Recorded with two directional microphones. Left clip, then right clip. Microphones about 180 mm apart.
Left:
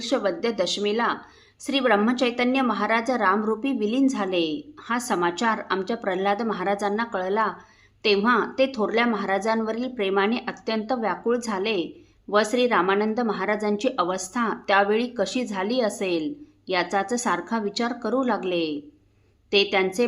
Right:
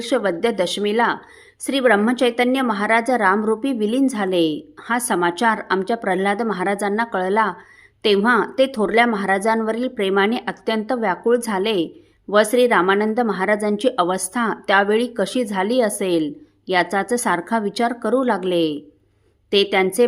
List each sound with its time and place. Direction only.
0.0 s a woman's voice: 30° right (ahead or behind)